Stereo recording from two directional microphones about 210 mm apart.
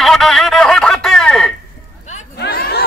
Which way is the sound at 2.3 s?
50° left (ahead or behind).